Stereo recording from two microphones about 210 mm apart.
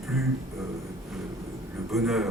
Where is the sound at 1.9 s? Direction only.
Centre (ahead or behind).